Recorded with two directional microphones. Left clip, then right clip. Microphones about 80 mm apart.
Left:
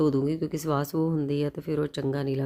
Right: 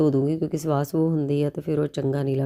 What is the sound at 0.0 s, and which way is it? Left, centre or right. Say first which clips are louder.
Speech: right 3 dB; right.